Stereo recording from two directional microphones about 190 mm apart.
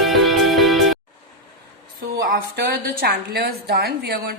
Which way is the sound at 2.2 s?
50° right (ahead or behind).